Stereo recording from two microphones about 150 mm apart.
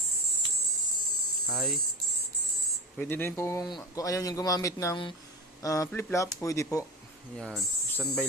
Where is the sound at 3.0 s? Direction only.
15° left (ahead or behind).